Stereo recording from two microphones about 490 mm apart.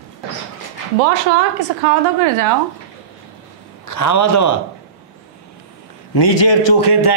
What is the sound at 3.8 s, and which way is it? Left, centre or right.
Speech, left.